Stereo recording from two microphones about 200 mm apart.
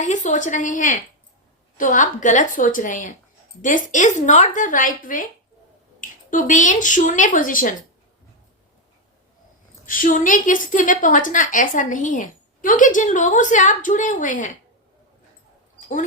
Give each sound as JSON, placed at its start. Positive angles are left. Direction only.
{"t": 0.0, "sound": "a woman's voice", "side_deg": 40}
{"t": 9.8, "sound": "a woman's voice", "side_deg": 45}
{"t": 15.8, "sound": "mouse", "side_deg": 40}